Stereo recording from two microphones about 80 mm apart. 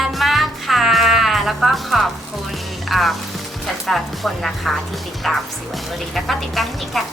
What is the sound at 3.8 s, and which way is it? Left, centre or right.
A woman's voice, centre.